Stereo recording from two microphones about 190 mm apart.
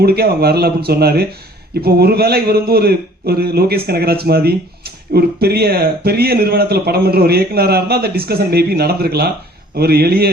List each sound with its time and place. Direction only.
0.0 s a man's voice: 55° right (ahead or behind)